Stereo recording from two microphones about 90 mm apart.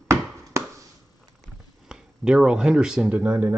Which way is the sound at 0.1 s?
30° right (ahead or behind).